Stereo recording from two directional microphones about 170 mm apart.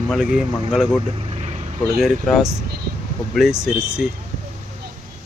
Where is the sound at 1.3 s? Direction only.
35° right (ahead or behind).